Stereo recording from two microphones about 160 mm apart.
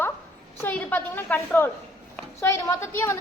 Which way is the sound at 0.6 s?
10° left (ahead or behind).